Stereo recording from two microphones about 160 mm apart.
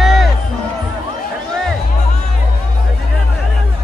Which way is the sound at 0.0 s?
Centre (ahead or behind).